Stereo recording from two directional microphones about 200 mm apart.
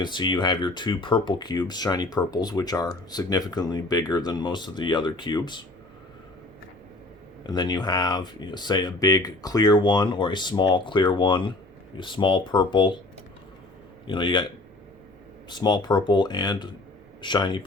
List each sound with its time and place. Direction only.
0.0 s speech: 20° left (ahead or behind)
7.4 s speech: 20° left (ahead or behind)
14.1 s speech: 25° left (ahead or behind)